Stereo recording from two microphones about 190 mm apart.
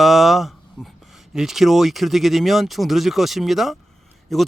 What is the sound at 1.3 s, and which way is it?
Speech, centre (ahead or behind).